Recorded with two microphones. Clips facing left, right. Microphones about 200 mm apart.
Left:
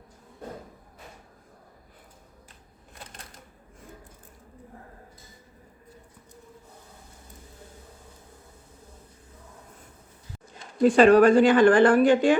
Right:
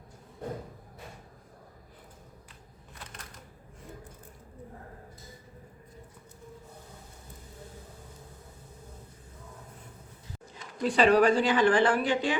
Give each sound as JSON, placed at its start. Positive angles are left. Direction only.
{"t": 10.8, "sound": "speech", "side_deg": 50}